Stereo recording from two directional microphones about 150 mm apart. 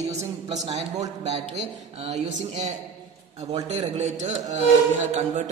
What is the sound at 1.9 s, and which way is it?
A man's voice, 45° right (ahead or behind).